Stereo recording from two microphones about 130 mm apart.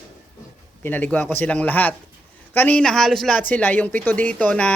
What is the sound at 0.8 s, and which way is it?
Speech, 15° left (ahead or behind).